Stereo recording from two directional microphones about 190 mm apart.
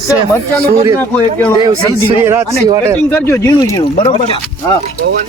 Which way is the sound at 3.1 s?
10° left (ahead or behind).